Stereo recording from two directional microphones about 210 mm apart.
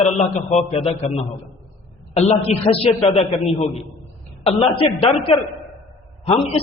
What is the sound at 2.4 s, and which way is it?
A woman's voice, 25° left (ahead or behind).